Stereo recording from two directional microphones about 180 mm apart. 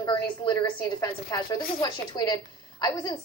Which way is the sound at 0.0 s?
20° left (ahead or behind).